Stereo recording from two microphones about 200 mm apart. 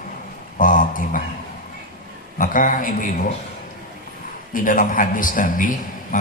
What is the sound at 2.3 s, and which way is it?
Speech, 40° left (ahead or behind).